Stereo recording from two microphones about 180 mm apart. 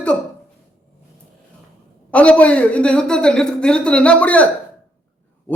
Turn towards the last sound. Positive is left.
turn(degrees=10)  # may be behind; listen again after turning